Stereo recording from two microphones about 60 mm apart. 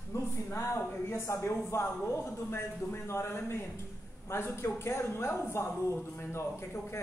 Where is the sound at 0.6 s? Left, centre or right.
Left.